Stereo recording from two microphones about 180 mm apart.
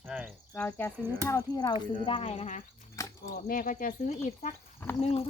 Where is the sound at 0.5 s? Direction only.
10° left (ahead or behind); by 2.6 s 40° left (ahead or behind).